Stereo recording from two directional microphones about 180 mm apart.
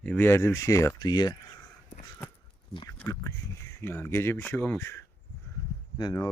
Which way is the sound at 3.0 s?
15° left (ahead or behind).